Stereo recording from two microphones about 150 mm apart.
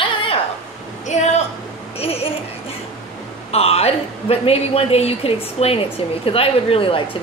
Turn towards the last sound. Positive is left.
turn(degrees=35)  # may be behind; listen again after turning